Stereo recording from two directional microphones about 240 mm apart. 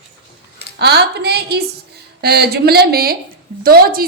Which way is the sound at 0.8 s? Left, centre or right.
Right.